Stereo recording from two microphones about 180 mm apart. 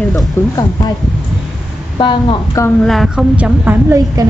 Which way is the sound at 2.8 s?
Centre (ahead or behind).